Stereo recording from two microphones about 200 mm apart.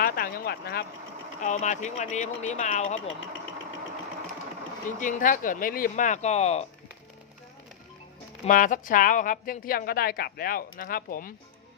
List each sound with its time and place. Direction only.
0.0 s a sound: 45° left (ahead or behind)
1.4 s speech: 35° left (ahead or behind)
4.9 s speech: 40° left (ahead or behind)
8.4 s a woman's voice: 40° left (ahead or behind)